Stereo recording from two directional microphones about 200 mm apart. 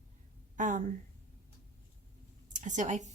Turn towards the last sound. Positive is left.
turn(degrees=-35)  # may be behind; listen again after turning